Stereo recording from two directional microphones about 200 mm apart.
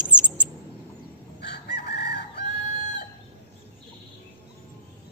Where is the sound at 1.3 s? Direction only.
55° left (ahead or behind).